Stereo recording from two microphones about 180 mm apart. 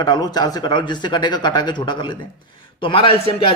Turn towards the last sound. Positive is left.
turn(degrees=30)  # may be behind; listen again after turning